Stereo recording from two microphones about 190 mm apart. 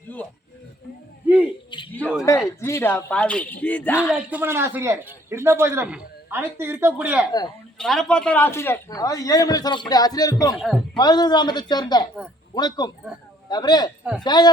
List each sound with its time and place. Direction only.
2.0 s a man's voice: 10° left (ahead or behind)
4.1 s a man's voice: 10° right (ahead or behind)
7.8 s a man's voice: 5° left (ahead or behind); by 13.9 s 20° left (ahead or behind)
14.0 s speech: 5° right (ahead or behind)
14.3 s a man's voice: 20° left (ahead or behind)